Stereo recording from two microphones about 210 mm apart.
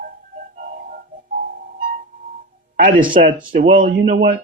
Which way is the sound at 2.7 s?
40° right (ahead or behind).